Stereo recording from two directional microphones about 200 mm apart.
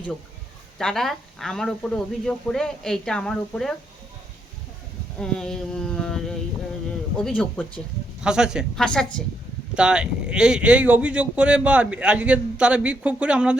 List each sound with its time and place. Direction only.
0.8 s speech: centre (ahead or behind)
5.2 s speech: 5° left (ahead or behind)
8.2 s speech: 5° right (ahead or behind)